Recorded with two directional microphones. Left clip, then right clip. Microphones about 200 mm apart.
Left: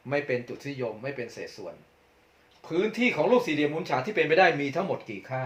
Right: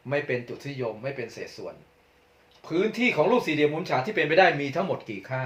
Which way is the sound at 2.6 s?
15° left (ahead or behind).